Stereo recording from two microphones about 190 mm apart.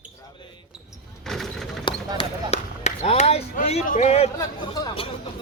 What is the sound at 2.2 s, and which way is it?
Speech, 30° left (ahead or behind).